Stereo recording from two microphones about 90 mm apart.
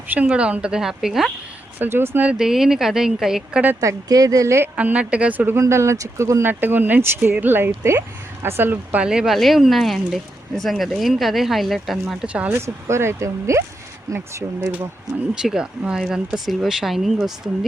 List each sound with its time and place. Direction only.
0.1 s a woman's voice: 15° right (ahead or behind)
1.8 s speech: 25° right (ahead or behind)
2.4 s speech: 5° right (ahead or behind)
3.8 s speech: 40° right (ahead or behind)
4.8 s a woman's voice: 15° right (ahead or behind)
5.5 s speech: 30° right (ahead or behind)
6.5 s speech: 20° right (ahead or behind)
9.0 s speech: 5° right (ahead or behind)
12.2 s a woman's voice: 15° right (ahead or behind)
12.5 s speech: 30° right (ahead or behind)
15.4 s speech: 10° right (ahead or behind)